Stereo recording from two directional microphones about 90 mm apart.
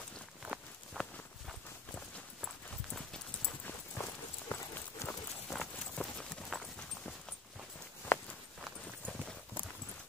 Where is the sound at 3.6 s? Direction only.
20° left (ahead or behind).